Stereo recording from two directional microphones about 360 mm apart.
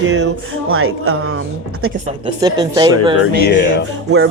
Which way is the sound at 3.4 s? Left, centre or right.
Left.